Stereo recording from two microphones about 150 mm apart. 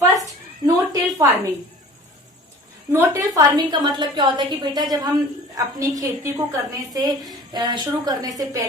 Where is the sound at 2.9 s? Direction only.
20° right (ahead or behind).